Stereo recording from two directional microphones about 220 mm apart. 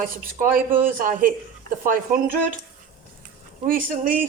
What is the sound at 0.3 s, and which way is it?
Speech, 40° right (ahead or behind).